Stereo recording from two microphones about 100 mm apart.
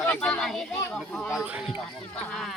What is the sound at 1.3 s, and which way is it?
Speech, 10° right (ahead or behind).